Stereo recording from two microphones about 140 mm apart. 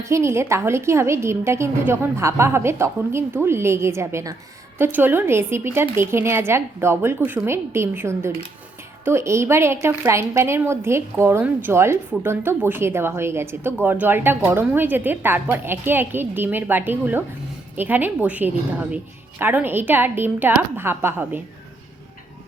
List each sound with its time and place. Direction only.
0.0 s a woman's voice: 20° right (ahead or behind)